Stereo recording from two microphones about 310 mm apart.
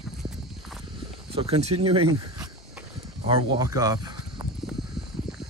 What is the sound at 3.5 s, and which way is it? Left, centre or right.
Speech, centre.